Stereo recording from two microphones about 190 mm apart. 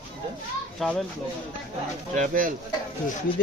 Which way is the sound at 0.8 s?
Centre (ahead or behind).